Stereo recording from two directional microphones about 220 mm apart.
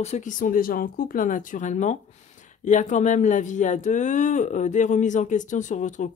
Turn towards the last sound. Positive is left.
turn(degrees=35)  # may be behind; listen again after turning